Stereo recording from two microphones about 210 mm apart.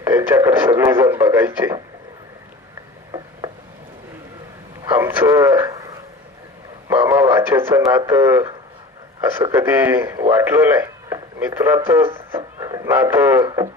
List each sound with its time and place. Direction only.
0.0 s speech: 10° right (ahead or behind)
4.9 s speech: 10° right (ahead or behind)
5.5 s radio: 10° right (ahead or behind)
6.8 s a man's voice: 10° right (ahead or behind)
13.4 s speech: 20° right (ahead or behind)